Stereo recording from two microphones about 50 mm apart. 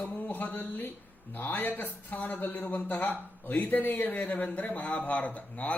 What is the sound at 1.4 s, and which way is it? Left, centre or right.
A man's voice, left.